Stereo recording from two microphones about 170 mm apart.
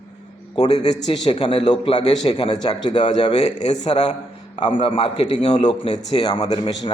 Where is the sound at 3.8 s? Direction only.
25° left (ahead or behind).